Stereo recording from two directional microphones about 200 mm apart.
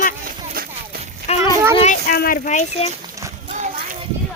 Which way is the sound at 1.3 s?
30° left (ahead or behind).